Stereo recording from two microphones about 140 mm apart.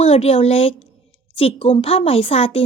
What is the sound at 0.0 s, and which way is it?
A woman's voice, 45° left (ahead or behind).